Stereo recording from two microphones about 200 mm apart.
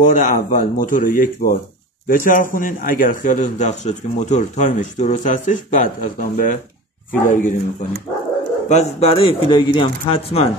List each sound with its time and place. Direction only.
0.0 s speech: 40° left (ahead or behind)
8.6 s speech: 30° left (ahead or behind)